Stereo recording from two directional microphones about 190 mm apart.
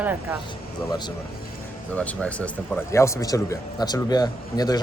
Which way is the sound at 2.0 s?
5° left (ahead or behind).